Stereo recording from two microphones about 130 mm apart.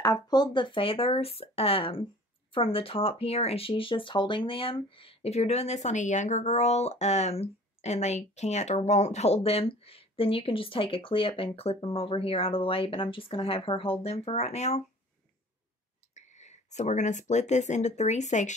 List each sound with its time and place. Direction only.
0.0 s a woman's voice: 30° left (ahead or behind); by 14.8 s 55° left (ahead or behind)
16.2 s speech: 60° left (ahead or behind)